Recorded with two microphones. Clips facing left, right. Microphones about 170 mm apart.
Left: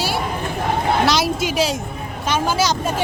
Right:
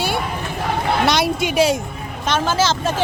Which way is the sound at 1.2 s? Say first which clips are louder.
Right 3 dB; centre (ahead or behind).